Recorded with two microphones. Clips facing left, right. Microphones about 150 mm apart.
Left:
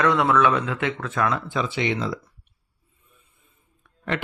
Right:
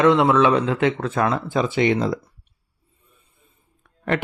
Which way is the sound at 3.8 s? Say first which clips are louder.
Right 5 dB; 50° right (ahead or behind).